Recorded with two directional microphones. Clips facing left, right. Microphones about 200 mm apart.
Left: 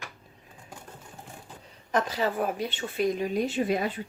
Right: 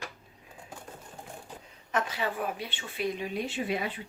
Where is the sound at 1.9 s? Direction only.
40° left (ahead or behind).